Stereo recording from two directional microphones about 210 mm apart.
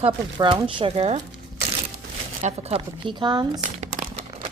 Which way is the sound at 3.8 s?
35° right (ahead or behind).